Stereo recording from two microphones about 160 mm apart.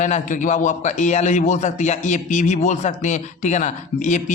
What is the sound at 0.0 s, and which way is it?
A man's voice, 50° left (ahead or behind).